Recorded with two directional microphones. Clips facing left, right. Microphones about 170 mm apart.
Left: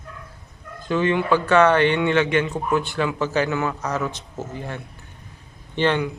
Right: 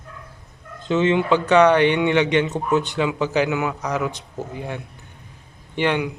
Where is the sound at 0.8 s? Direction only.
20° right (ahead or behind).